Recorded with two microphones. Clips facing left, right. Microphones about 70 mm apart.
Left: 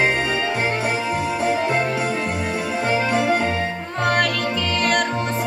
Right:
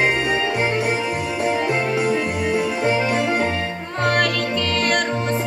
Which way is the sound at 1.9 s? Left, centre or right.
Right.